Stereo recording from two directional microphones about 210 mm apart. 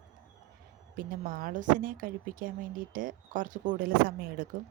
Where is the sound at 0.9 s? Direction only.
40° right (ahead or behind).